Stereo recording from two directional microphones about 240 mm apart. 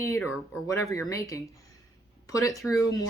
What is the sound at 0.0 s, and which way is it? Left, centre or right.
Speech, centre.